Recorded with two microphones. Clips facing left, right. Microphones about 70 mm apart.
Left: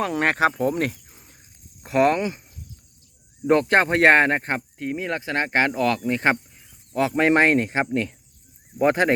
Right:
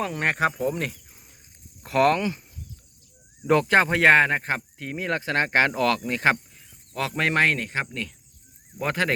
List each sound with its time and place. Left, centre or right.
0.0 s speech: left
0.6 s speech: left
1.1 s a sound: left
1.8 s speech: left
3.5 s speech: left
4.5 s speech: centre